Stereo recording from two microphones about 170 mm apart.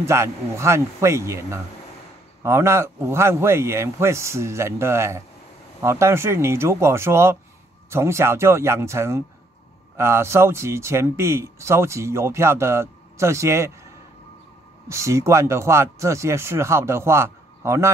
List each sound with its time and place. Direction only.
0.0 s speech: 15° right (ahead or behind)
14.9 s speech: 15° right (ahead or behind)